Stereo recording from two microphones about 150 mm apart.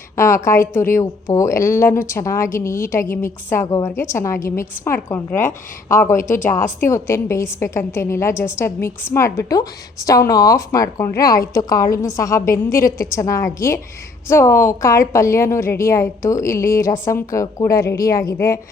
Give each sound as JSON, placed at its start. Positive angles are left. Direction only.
{"t": 0.2, "sound": "a woman's voice", "side_deg": 20}
{"t": 6.1, "sound": "speech", "side_deg": 65}
{"t": 6.4, "sound": "a woman's voice", "side_deg": 15}